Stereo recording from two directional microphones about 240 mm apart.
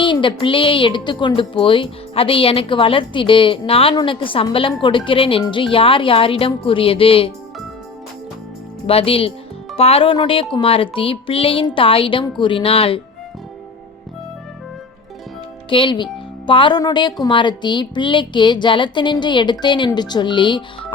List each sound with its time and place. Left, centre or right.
0.0 s a woman's voice: left
8.9 s a woman's voice: left
15.7 s a woman's voice: centre